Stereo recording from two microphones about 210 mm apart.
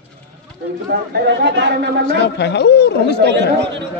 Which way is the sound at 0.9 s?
55° right (ahead or behind).